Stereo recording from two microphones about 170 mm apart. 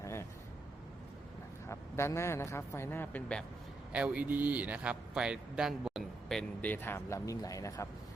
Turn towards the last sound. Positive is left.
turn(degrees=20)  # may be behind; listen again after turning